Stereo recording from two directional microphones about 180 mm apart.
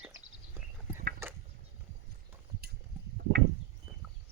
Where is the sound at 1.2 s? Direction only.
15° right (ahead or behind).